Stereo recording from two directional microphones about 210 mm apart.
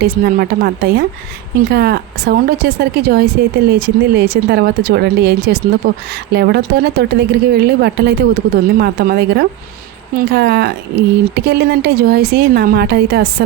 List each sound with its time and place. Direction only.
0.0 s speech: 50° right (ahead or behind)